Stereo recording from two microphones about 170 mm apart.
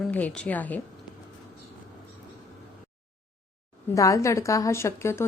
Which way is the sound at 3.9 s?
20° left (ahead or behind).